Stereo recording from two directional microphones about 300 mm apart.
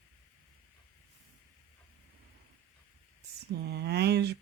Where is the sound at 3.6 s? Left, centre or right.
Right.